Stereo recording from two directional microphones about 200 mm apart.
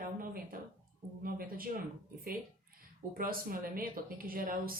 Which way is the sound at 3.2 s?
45° right (ahead or behind).